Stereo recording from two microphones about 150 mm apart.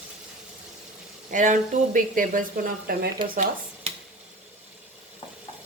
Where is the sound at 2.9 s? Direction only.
75° right (ahead or behind).